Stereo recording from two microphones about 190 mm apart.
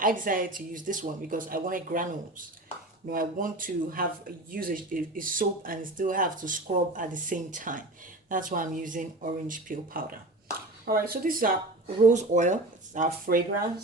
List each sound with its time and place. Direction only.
0.0 s speech: 45° right (ahead or behind)
3.1 s speech: 45° right (ahead or behind)